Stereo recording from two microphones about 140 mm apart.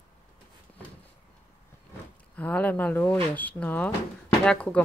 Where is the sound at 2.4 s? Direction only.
10° left (ahead or behind).